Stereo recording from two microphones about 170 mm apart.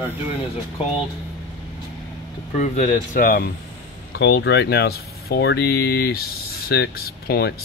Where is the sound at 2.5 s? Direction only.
45° left (ahead or behind).